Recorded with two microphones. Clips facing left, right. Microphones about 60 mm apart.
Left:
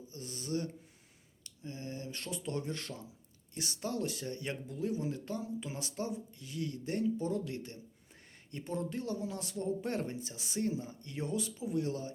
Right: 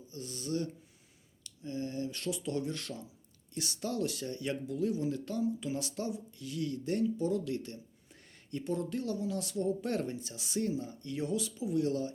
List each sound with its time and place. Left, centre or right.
0.1 s speech: left